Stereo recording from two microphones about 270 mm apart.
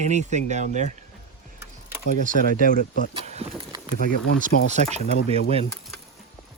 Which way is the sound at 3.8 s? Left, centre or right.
Left.